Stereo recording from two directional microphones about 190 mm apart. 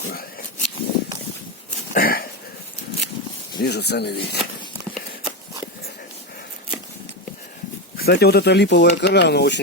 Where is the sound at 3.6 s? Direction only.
60° left (ahead or behind).